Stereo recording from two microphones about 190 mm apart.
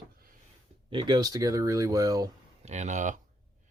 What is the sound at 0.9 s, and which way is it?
Speech, 25° right (ahead or behind).